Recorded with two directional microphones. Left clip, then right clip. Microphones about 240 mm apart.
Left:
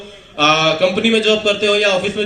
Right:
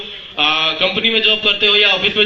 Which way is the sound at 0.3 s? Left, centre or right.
Left.